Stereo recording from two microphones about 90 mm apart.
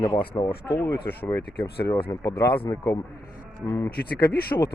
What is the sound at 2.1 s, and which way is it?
Speech, 35° left (ahead or behind).